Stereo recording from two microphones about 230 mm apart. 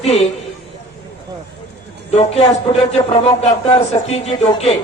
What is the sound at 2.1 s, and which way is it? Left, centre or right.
A man's voice, left.